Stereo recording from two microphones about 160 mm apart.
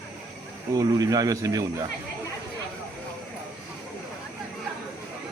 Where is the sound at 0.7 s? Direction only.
25° right (ahead or behind).